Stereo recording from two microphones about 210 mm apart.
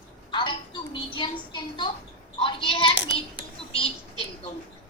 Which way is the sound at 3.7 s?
25° left (ahead or behind).